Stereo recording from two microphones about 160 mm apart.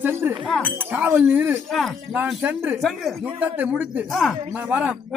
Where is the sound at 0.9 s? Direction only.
10° right (ahead or behind).